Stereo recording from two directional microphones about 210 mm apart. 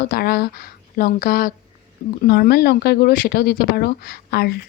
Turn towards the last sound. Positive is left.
turn(degrees=50)  # may be behind; listen again after turning